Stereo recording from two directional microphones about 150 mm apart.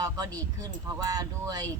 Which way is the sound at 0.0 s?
25° right (ahead or behind).